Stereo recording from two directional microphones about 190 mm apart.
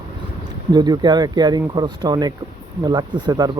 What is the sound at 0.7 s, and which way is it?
Speech, 20° right (ahead or behind).